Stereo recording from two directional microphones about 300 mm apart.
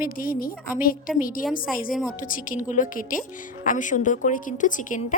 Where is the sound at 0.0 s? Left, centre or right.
Left.